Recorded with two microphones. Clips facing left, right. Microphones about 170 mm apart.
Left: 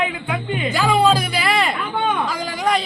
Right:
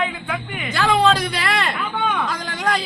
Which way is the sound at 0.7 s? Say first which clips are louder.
Even; 10° left (ahead or behind).